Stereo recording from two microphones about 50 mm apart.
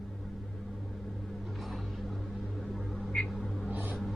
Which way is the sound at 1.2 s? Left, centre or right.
Centre.